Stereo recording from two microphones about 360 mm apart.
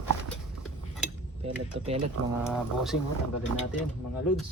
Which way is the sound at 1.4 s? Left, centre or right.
Centre.